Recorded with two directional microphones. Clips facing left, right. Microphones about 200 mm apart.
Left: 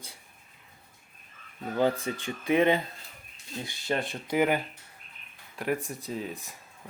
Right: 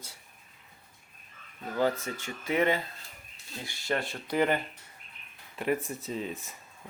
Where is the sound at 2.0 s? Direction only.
15° left (ahead or behind).